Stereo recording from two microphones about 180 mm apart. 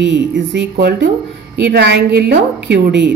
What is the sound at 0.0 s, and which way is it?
A woman's voice, 80° right.